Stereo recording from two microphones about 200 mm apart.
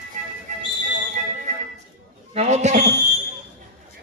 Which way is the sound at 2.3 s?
35° right (ahead or behind).